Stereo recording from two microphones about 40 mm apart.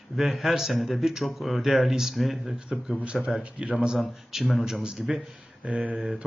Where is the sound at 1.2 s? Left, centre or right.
Centre.